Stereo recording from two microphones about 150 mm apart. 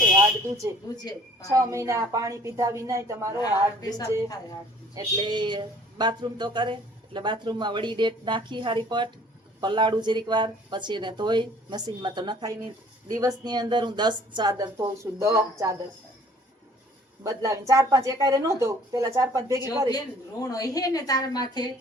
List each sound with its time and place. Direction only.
0.2 s a sound: 20° right (ahead or behind)
1.5 s speech: 20° right (ahead or behind)
3.3 s a woman's voice: 25° left (ahead or behind)
4.9 s speech: 30° right (ahead or behind)
17.2 s speech: 20° right (ahead or behind)
20.4 s a woman's voice: 25° left (ahead or behind)